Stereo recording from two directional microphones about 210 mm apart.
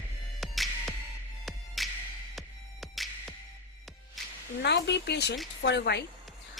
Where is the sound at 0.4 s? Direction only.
Centre (ahead or behind).